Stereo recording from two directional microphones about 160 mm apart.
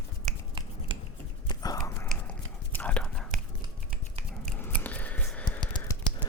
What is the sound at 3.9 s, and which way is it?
Finger snapping, 50° right (ahead or behind).